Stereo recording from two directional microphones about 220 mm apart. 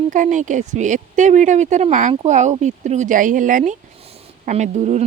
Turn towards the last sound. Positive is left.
turn(degrees=-30)  # may be behind; listen again after turning